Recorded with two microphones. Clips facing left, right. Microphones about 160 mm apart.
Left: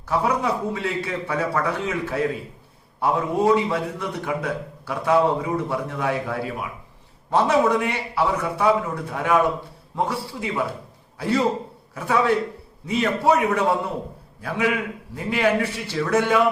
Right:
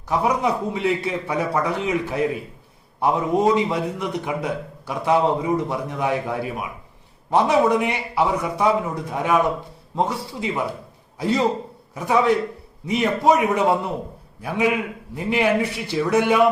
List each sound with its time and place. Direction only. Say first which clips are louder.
0.1 s a man's voice: right 1 dB; 15° right (ahead or behind)